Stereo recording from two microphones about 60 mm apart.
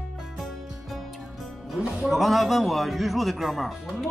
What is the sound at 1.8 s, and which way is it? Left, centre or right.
Music, centre.